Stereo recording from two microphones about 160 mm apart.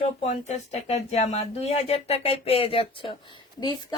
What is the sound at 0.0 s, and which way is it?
Speech, 45° left (ahead or behind).